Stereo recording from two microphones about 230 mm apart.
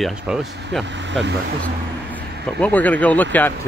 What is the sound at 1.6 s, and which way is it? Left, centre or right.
Speech, centre.